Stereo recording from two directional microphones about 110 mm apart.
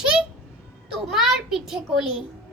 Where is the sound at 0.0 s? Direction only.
5° right (ahead or behind).